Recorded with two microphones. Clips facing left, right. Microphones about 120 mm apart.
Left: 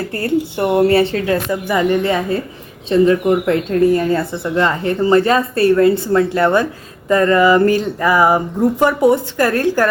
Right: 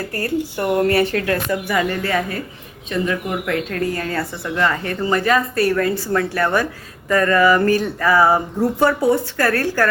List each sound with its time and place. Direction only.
0.1 s speech: 25° left (ahead or behind)
2.9 s a woman's voice: 30° left (ahead or behind)